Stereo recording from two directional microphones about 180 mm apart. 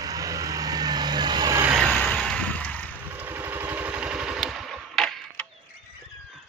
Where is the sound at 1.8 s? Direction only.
Centre (ahead or behind).